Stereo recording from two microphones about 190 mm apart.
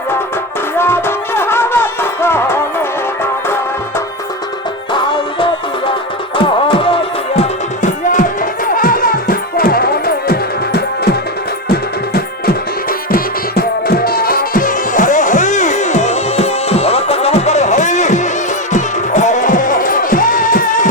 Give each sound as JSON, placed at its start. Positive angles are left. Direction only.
{"t": 0.8, "sound": "music", "side_deg": 10}
{"t": 6.3, "sound": "music", "side_deg": 25}
{"t": 8.7, "sound": "music", "side_deg": 45}
{"t": 13.1, "sound": "music", "side_deg": 50}